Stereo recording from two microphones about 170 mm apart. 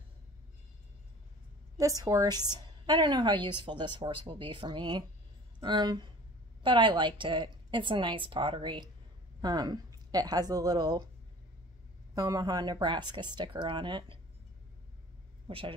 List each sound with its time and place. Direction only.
1.8 s a woman's voice: 20° right (ahead or behind)
12.2 s a woman's voice: 20° right (ahead or behind)
15.4 s a woman's voice: 30° right (ahead or behind)